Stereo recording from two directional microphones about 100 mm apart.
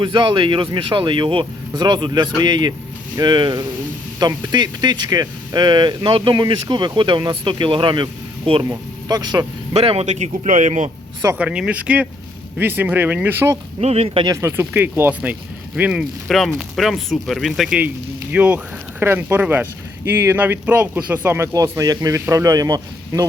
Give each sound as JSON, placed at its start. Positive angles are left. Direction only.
{"t": 0.0, "sound": "speech", "side_deg": -50}
{"t": 6.3, "sound": "speech", "side_deg": -45}
{"t": 8.6, "sound": "speech", "side_deg": -35}
{"t": 9.7, "sound": "speech", "side_deg": -80}
{"t": 11.3, "sound": "speech", "side_deg": -10}
{"t": 13.8, "sound": "speech", "side_deg": -90}
{"t": 14.4, "sound": "speech", "side_deg": -25}
{"t": 17.7, "sound": "speech", "side_deg": -15}
{"t": 21.5, "sound": "speech", "side_deg": -35}